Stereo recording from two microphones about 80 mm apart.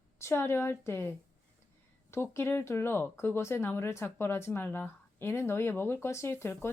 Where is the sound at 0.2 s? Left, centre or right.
Left.